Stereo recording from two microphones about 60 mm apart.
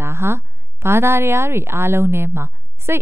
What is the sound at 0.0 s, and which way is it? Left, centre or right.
Speech, right.